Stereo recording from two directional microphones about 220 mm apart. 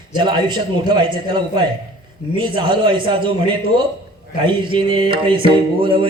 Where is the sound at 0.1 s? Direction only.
20° right (ahead or behind).